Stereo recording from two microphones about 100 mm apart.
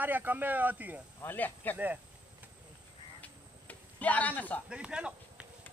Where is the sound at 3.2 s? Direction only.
15° left (ahead or behind).